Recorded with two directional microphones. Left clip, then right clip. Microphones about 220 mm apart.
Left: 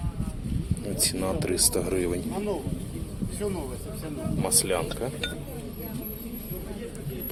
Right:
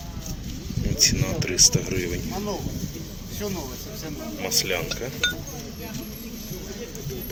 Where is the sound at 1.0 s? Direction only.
15° left (ahead or behind).